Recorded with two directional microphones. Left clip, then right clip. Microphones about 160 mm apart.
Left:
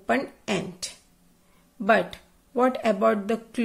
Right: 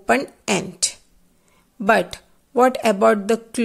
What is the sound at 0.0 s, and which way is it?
Speech, 30° right (ahead or behind).